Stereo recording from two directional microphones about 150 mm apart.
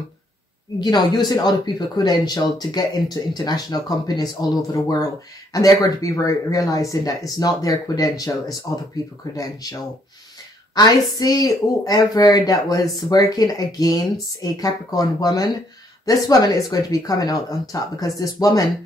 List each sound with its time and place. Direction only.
0.7 s speech: 25° left (ahead or behind)
10.7 s a sound: 25° left (ahead or behind)
11.1 s speech: 25° left (ahead or behind)